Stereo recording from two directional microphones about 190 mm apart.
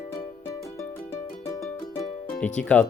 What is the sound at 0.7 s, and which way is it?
Music, 15° left (ahead or behind).